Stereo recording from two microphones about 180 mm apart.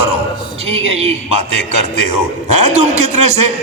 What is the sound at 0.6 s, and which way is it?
A man's voice, 35° right (ahead or behind).